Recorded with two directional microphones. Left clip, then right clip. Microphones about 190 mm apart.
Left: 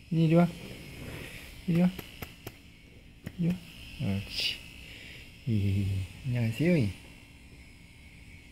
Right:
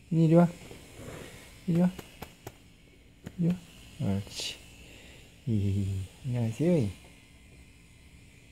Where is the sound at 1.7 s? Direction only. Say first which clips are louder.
Even; 20° right (ahead or behind).